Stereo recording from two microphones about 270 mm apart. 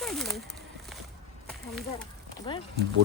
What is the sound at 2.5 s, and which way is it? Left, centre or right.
Speech, centre.